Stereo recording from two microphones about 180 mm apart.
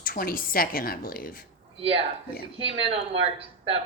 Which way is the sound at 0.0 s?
50° left (ahead or behind).